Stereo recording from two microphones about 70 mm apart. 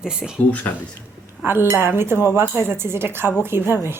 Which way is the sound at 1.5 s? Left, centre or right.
Right.